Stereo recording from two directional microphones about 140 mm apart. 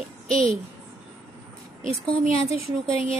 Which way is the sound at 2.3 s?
45° left (ahead or behind).